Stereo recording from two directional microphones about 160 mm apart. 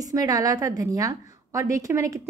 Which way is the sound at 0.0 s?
20° right (ahead or behind).